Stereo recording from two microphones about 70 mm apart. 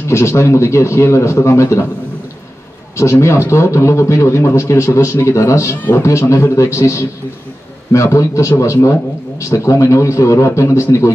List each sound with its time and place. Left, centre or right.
0.1 s a man's voice: left
3.0 s a man's voice: left